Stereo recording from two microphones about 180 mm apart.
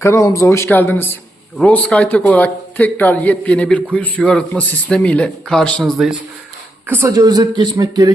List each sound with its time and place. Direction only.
0.0 s speech: 15° left (ahead or behind); by 6.1 s centre (ahead or behind)
6.8 s speech: 15° right (ahead or behind)